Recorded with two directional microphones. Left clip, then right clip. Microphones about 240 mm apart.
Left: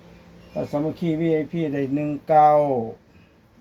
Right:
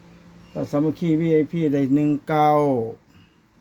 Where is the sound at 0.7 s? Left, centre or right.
Right.